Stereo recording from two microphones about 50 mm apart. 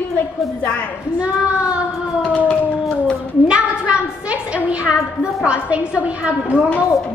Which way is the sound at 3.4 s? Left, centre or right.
Right.